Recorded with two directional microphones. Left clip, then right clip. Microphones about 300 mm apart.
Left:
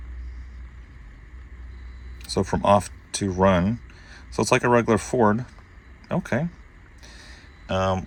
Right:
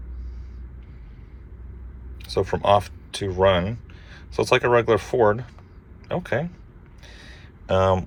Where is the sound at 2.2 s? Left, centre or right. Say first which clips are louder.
Right 1 dB; left.